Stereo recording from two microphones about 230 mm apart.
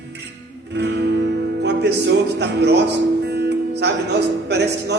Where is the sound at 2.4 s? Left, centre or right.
Right.